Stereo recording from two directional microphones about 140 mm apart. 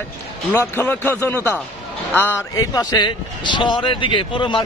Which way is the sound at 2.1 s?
15° left (ahead or behind).